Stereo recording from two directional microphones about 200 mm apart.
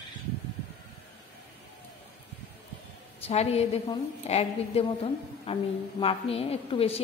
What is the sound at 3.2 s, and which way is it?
A woman's voice, 30° left (ahead or behind).